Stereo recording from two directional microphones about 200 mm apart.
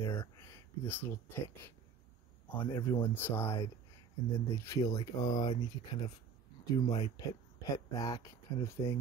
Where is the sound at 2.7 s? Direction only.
10° left (ahead or behind).